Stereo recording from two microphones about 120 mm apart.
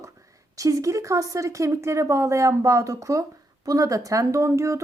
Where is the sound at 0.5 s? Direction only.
30° right (ahead or behind).